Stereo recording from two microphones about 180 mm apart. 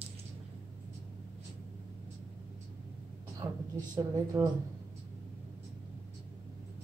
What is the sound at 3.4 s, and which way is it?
Speech, 15° right (ahead or behind).